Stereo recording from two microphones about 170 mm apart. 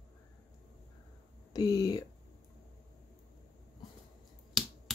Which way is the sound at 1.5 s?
20° left (ahead or behind).